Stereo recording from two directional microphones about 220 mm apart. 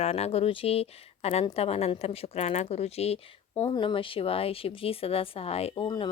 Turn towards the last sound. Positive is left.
turn(degrees=20)  # may be behind; listen again after turning